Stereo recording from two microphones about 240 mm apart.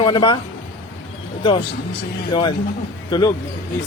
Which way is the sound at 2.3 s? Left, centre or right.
Centre.